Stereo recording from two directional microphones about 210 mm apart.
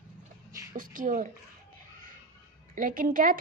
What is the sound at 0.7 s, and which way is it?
Speech, 40° right (ahead or behind).